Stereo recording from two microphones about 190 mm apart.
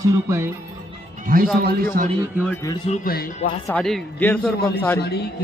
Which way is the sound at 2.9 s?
50° left (ahead or behind).